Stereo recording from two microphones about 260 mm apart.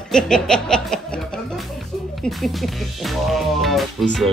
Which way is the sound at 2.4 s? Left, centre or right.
Centre.